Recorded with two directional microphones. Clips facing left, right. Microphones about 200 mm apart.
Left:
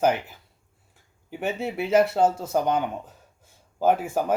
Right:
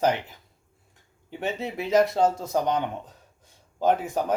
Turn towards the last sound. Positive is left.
turn(degrees=10)  # may be behind; listen again after turning